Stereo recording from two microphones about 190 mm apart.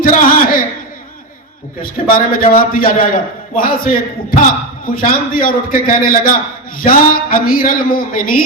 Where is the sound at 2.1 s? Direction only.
50° left (ahead or behind).